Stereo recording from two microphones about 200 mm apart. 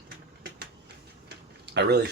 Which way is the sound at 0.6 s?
55° right (ahead or behind).